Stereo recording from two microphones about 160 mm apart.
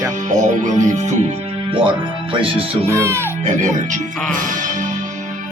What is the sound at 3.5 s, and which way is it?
Speech, 50° right (ahead or behind).